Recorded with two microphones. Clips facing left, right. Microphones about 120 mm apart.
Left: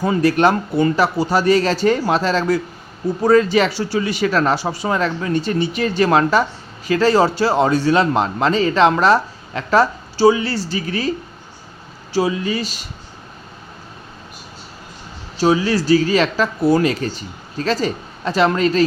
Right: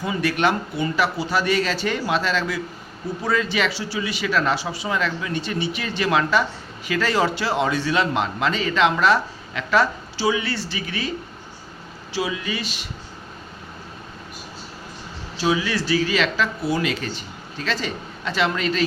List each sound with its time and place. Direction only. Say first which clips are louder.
0.0 s speech: left 7 dB; 40° left (ahead or behind)
12.1 s speech: left 7 dB; 35° left (ahead or behind)
15.4 s speech: left 6 dB; 40° left (ahead or behind)